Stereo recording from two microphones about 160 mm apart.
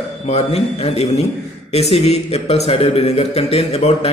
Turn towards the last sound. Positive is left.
turn(degrees=40)  # may be behind; listen again after turning